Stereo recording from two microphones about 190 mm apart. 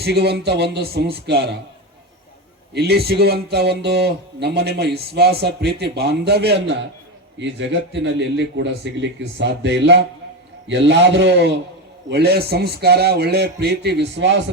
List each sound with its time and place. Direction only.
0.0 s speech: 60° right (ahead or behind)
2.7 s speech: 60° right (ahead or behind)